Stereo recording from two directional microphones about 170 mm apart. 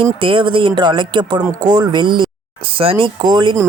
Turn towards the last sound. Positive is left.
turn(degrees=-25)  # may be behind; listen again after turning